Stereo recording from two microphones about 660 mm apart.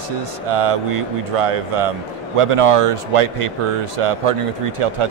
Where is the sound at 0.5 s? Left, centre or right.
Right.